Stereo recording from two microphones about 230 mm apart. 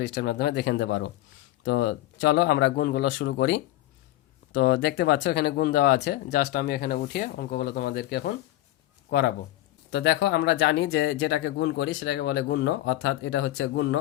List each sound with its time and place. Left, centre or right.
0.0 s speech: left